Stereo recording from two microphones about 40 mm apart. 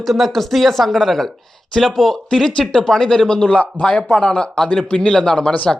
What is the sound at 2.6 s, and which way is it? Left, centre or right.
Speech, left.